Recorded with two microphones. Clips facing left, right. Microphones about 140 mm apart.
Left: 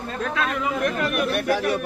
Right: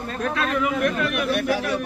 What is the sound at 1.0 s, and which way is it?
Speech, 45° left (ahead or behind).